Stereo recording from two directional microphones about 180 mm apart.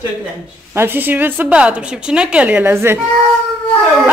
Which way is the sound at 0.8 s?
10° right (ahead or behind).